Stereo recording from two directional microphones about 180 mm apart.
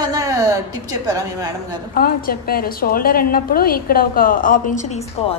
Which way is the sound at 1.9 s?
55° left (ahead or behind).